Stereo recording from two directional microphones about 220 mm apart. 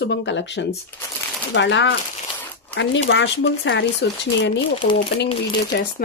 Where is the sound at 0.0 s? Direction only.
55° left (ahead or behind).